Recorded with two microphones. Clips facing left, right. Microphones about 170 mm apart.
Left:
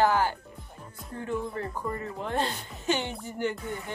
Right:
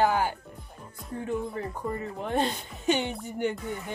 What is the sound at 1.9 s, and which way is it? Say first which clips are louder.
Speech: right 1 dB; 15° right (ahead or behind).